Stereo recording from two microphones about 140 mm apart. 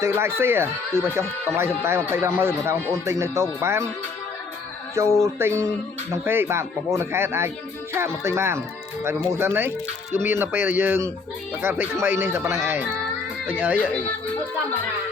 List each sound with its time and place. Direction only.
0.0 s speech: 20° right (ahead or behind)
5.2 s speech: 20° right (ahead or behind)